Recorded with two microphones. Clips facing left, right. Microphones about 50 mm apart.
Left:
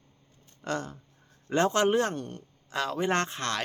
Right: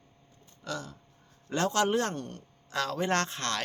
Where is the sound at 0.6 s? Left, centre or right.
Left.